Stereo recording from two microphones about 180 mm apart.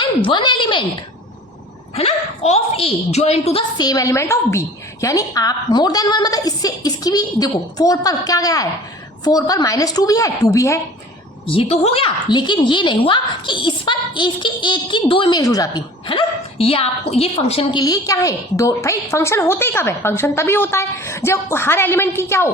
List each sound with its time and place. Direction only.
0.0 s a woman's voice: 25° left (ahead or behind)
2.0 s a woman's voice: 35° left (ahead or behind); by 10.8 s 20° left (ahead or behind)
11.4 s a woman's voice: 30° left (ahead or behind); by 22.4 s 15° left (ahead or behind)